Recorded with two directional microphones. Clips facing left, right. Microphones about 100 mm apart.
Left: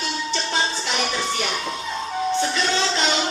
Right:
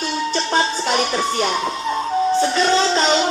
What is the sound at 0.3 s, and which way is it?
Music, 45° right (ahead or behind).